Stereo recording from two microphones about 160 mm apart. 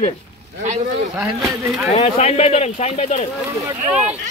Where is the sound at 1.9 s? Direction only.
45° left (ahead or behind).